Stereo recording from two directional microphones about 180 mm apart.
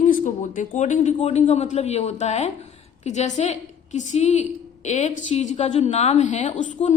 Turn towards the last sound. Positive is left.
turn(degrees=40)  # may be behind; listen again after turning